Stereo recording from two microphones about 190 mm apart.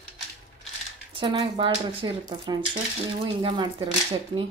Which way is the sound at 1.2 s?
25° right (ahead or behind).